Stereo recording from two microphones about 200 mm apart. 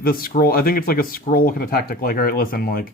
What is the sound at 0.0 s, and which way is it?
Speech, 45° left (ahead or behind).